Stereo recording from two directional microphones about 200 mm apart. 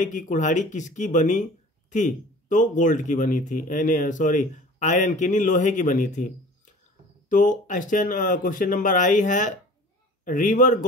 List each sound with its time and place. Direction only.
0.0 s speech: 40° left (ahead or behind)